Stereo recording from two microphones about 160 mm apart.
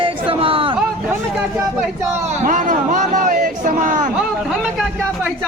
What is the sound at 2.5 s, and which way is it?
Speech, 50° right (ahead or behind).